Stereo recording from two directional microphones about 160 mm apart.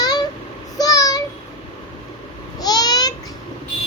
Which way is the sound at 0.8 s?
20° left (ahead or behind).